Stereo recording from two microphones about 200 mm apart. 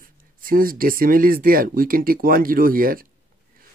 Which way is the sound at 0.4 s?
45° right (ahead or behind).